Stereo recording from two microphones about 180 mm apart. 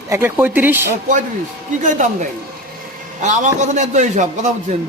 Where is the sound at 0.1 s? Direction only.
10° right (ahead or behind).